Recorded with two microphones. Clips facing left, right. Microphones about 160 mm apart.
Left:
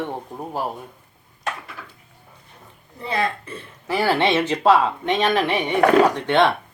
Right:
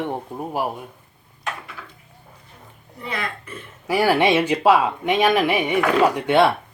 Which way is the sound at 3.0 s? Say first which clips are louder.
Left 5 dB; 30° left (ahead or behind).